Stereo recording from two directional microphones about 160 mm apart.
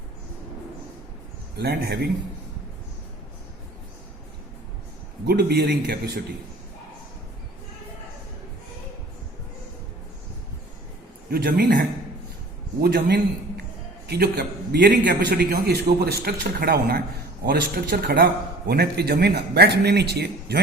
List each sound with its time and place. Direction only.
1.5 s a man's voice: 75° right (ahead or behind)
5.2 s a man's voice: 85° right
11.3 s a man's voice: 80° right
12.8 s a man's voice: 85° right; by 18.3 s 70° right (ahead or behind)
18.7 s speech: 80° right